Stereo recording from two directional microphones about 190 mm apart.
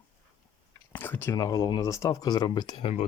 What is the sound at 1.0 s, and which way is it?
Speech, 10° left (ahead or behind).